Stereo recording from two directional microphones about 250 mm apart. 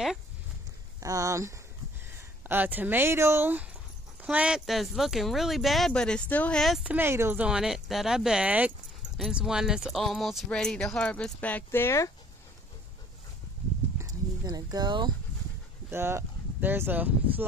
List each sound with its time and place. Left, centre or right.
1.0 s speech: centre
13.9 s horse: centre
15.9 s speech: centre